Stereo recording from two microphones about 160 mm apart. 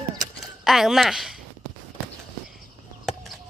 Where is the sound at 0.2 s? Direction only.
Centre (ahead or behind).